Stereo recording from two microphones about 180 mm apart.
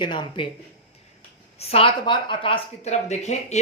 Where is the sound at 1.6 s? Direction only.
35° left (ahead or behind).